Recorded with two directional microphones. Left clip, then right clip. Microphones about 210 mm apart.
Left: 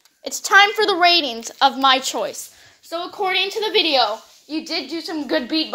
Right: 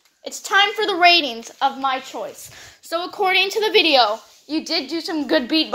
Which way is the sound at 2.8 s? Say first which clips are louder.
Right 3 dB; 30° right (ahead or behind).